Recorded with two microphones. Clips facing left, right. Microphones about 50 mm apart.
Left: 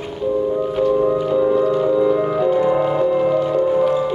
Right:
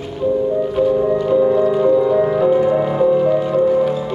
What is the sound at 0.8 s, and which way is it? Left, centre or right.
Music, centre.